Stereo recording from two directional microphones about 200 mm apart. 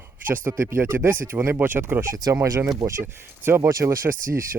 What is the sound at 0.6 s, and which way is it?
Speech, 10° right (ahead or behind).